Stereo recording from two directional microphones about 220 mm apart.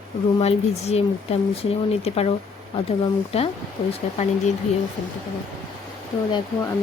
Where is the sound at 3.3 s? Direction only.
25° left (ahead or behind).